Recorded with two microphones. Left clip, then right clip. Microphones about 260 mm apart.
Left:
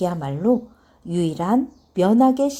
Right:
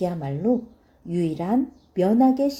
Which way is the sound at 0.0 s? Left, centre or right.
Left.